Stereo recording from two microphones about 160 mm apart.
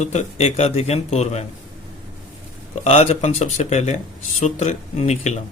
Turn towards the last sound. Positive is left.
turn(degrees=45)  # may be behind; listen again after turning